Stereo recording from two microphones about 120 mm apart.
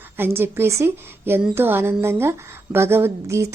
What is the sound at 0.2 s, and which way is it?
A woman's voice, 20° right (ahead or behind).